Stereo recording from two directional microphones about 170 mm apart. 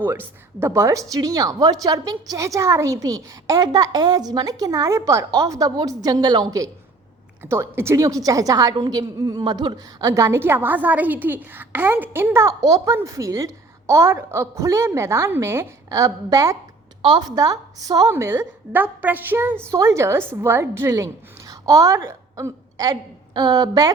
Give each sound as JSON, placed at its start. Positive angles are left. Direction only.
{"t": 0.0, "sound": "a woman's voice", "side_deg": -10}